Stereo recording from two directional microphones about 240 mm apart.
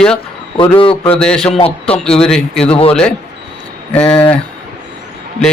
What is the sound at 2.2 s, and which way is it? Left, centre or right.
Speech, centre.